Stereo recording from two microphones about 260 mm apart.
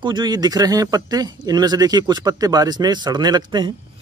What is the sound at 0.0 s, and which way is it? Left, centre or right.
Speech, centre.